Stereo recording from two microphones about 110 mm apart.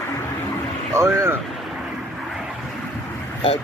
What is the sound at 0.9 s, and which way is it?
Speech, 25° right (ahead or behind).